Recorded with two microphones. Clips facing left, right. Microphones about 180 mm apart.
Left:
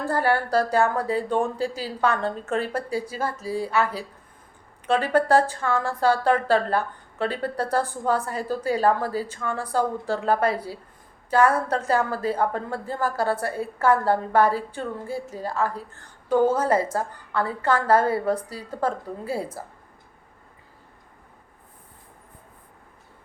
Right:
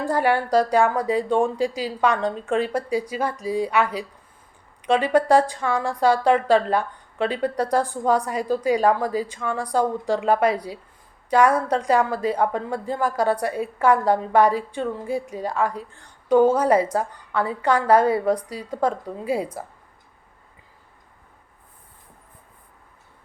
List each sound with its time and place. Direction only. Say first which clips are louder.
0.0 s speech: right 2 dB; 15° right (ahead or behind)